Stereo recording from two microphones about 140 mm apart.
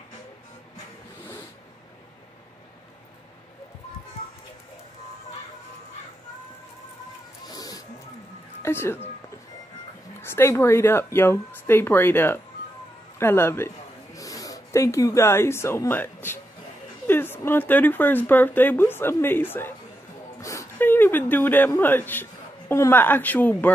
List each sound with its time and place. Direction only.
7.4 s a sound: 25° left (ahead or behind)
8.6 s speech: 15° left (ahead or behind)
10.2 s a woman's voice: 15° left (ahead or behind)